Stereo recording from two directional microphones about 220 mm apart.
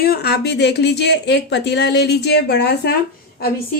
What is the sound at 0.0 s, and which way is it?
A woman's voice, 45° left (ahead or behind).